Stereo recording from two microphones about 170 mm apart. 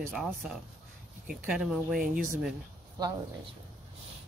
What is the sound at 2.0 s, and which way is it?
Speech, 50° right (ahead or behind).